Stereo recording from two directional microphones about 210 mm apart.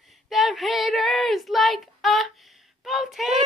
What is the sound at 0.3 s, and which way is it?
Child singing, centre (ahead or behind).